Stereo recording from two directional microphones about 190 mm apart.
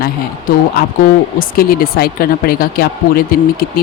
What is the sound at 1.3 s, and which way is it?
Speech, 50° left (ahead or behind).